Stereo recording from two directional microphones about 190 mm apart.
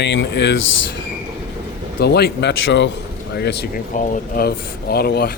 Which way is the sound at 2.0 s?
60° left (ahead or behind).